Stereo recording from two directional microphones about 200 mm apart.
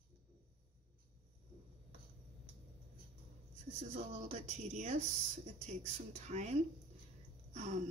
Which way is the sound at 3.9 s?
35° right (ahead or behind).